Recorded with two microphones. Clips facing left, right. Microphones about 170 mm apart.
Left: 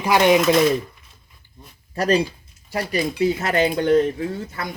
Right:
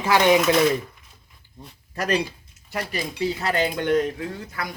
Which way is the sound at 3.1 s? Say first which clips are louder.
Left 3 dB; 15° left (ahead or behind).